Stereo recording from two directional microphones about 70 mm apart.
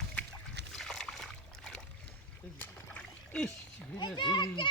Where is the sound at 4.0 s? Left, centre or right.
Left.